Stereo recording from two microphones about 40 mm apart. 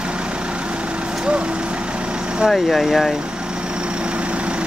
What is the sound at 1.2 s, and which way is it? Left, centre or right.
Vehicle, right.